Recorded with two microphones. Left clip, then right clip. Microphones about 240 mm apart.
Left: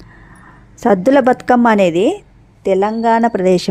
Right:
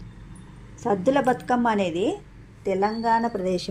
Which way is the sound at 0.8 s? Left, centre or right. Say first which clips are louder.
Left 11 dB; left.